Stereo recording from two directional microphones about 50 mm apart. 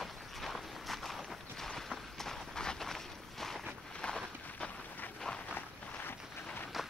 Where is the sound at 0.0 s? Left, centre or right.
Centre.